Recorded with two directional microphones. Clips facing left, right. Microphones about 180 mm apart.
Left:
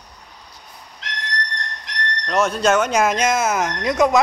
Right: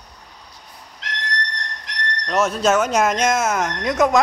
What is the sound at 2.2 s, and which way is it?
Speech, 5° right (ahead or behind).